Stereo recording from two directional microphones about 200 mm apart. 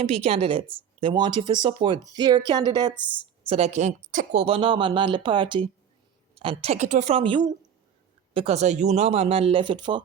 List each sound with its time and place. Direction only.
0.0 s speech: 30° right (ahead or behind)
3.5 s speech: 35° right (ahead or behind)